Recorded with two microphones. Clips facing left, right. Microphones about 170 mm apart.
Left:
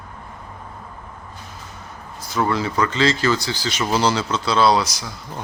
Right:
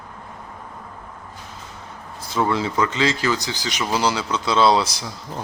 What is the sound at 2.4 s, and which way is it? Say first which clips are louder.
Speech: even; 20° right (ahead or behind).